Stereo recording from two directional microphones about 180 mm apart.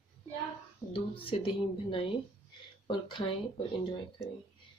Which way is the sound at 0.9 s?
30° left (ahead or behind).